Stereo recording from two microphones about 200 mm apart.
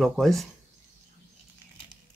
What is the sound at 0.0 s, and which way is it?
Speech, centre (ahead or behind).